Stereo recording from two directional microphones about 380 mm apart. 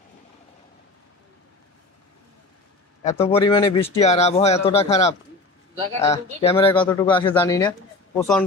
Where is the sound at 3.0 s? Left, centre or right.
Centre.